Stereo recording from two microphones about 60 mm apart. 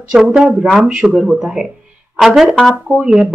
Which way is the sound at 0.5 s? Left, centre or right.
Right.